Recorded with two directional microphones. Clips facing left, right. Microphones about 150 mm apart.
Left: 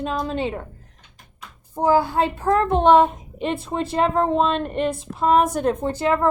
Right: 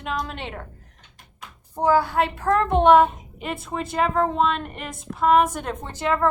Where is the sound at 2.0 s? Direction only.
25° left (ahead or behind).